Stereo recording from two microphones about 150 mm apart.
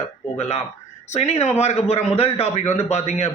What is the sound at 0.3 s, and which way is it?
A man's voice, 45° left (ahead or behind).